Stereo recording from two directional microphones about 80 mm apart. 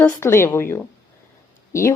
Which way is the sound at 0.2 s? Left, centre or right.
Left.